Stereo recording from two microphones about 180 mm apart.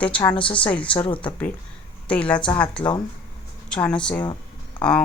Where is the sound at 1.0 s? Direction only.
30° left (ahead or behind).